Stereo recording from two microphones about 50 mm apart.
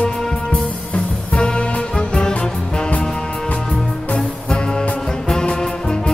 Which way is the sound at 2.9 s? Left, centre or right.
Left.